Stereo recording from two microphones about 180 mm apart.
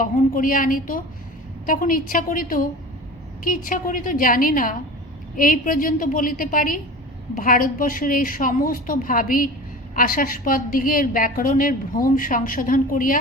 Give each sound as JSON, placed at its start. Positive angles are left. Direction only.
{"t": 0.0, "sound": "a woman's voice", "side_deg": 50}